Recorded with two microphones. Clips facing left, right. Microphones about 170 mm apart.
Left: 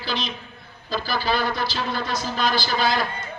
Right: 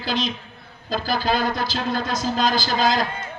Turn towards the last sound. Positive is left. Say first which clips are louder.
# right 2 dB
turn(degrees=-45)  # may be behind; listen again after turning